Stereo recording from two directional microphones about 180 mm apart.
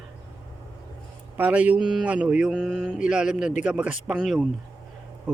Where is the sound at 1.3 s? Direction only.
10° right (ahead or behind).